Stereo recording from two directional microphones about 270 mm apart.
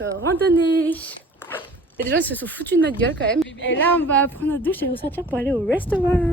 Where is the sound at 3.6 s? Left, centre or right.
Left.